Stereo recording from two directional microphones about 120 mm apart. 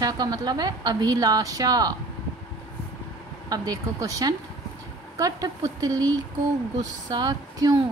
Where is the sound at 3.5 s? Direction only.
30° right (ahead or behind).